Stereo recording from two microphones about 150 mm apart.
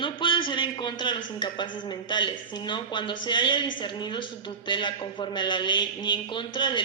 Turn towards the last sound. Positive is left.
turn(degrees=30)  # may be behind; listen again after turning